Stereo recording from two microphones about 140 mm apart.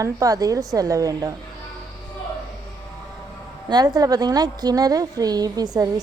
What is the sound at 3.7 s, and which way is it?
A woman's voice, 30° right (ahead or behind).